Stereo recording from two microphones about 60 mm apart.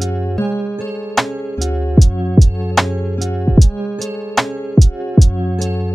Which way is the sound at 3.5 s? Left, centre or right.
Centre.